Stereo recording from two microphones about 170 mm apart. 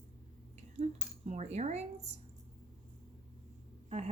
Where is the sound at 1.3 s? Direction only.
40° right (ahead or behind).